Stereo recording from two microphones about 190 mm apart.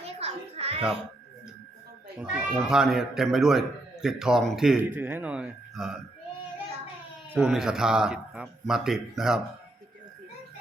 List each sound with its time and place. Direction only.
0.0 s children playing: 35° right (ahead or behind)
2.2 s speech: 5° right (ahead or behind)
7.3 s speech: 5° right (ahead or behind)